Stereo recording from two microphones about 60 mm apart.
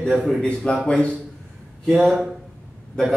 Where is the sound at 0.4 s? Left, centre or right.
Centre.